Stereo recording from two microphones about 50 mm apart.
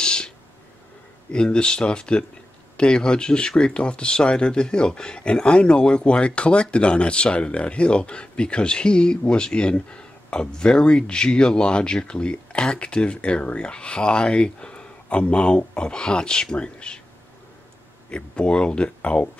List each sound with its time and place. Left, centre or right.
0.0 s a sound: centre
1.3 s speech: centre
18.1 s speech: left